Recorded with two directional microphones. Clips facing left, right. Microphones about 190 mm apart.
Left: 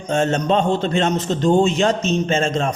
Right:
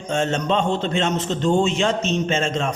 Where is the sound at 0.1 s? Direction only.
40° left (ahead or behind).